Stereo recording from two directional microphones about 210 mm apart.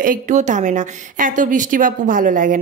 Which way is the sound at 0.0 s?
35° right (ahead or behind).